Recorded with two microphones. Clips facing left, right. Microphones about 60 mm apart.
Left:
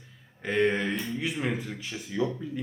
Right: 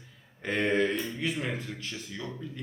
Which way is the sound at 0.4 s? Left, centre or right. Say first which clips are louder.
Left 1 dB; centre.